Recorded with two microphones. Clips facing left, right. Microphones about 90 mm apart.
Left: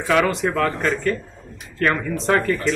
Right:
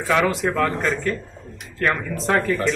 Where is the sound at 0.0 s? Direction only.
Centre (ahead or behind).